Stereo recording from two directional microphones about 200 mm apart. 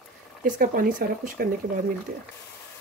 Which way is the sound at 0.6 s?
45° right (ahead or behind).